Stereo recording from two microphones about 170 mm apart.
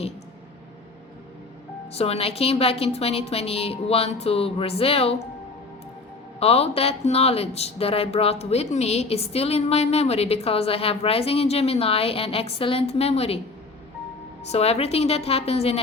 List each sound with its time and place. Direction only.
1.9 s speech: 35° left (ahead or behind)
6.4 s speech: 35° left (ahead or behind)
14.5 s speech: 35° left (ahead or behind)